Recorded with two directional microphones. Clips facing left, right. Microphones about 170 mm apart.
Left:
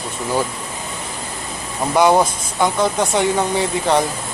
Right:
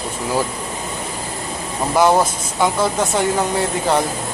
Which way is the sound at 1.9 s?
Centre (ahead or behind).